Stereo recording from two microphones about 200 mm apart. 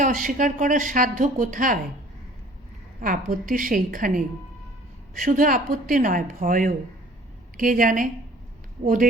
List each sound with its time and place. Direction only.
0.0 s a woman's voice: 40° right (ahead or behind)
3.0 s a woman's voice: 40° right (ahead or behind)